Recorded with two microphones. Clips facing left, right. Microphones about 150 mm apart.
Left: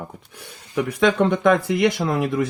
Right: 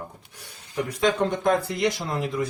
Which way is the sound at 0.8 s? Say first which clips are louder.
Left 5 dB; 80° left.